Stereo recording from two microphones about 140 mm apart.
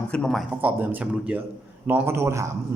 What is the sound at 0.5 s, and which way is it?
A woman's voice, 10° right (ahead or behind).